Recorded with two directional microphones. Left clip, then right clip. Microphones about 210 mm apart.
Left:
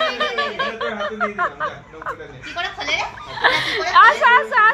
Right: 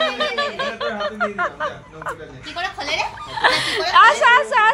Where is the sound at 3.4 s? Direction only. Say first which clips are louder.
Even; 10° right (ahead or behind).